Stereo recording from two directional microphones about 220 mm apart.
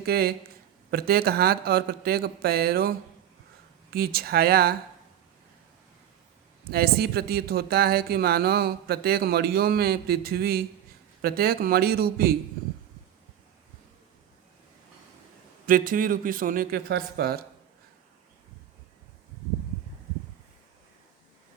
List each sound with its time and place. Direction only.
0.0 s speech: 45° right (ahead or behind)
3.9 s speech: 45° right (ahead or behind)
6.7 s speech: 45° right (ahead or behind)
15.6 s a man's voice: 40° right (ahead or behind)